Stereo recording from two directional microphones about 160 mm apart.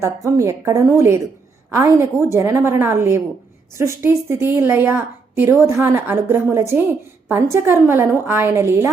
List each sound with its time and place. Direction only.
0.0 s a woman's voice: 20° right (ahead or behind)